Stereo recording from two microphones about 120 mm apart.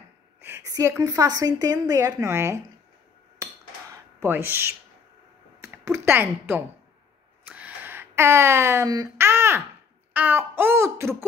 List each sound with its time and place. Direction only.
0.4 s a woman's voice: 20° right (ahead or behind)
3.4 s hammer: 30° right (ahead or behind)
3.9 s a sound: 20° right (ahead or behind)
4.5 s a woman's voice: 20° right (ahead or behind)
7.4 s a sound: 15° right (ahead or behind)
9.2 s babbling: 20° right (ahead or behind)
10.1 s a woman's voice: 15° right (ahead or behind)